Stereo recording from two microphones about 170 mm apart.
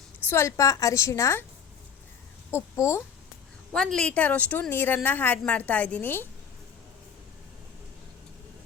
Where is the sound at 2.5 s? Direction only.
15° left (ahead or behind).